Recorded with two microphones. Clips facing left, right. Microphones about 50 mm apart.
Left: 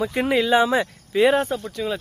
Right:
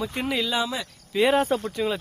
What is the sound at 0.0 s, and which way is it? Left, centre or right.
Speech, left.